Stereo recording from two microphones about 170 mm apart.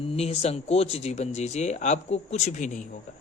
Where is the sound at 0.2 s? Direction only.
35° left (ahead or behind).